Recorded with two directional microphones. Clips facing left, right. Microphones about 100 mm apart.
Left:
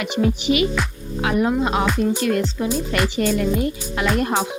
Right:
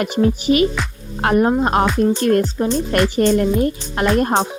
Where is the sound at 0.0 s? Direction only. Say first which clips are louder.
Right 3 dB; 40° right (ahead or behind).